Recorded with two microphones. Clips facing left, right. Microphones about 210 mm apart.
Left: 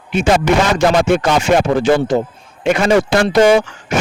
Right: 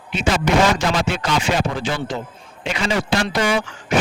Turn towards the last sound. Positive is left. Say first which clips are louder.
# left 7 dB
turn(degrees=45)  # may be behind; listen again after turning